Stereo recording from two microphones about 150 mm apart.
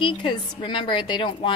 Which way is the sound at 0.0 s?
30° left (ahead or behind).